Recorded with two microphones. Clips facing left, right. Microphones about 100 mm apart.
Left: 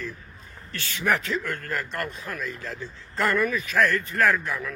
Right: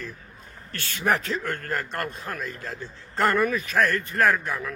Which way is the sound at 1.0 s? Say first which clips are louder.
Even; 30° right (ahead or behind).